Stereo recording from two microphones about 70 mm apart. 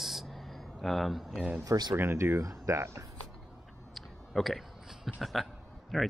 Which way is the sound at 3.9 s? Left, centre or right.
Centre.